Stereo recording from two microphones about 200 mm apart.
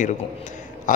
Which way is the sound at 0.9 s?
40° left (ahead or behind).